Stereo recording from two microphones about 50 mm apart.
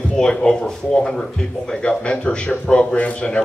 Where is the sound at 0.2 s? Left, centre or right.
Centre.